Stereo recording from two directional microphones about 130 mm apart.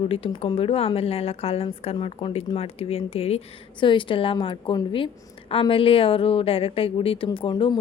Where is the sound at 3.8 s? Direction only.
40° left (ahead or behind).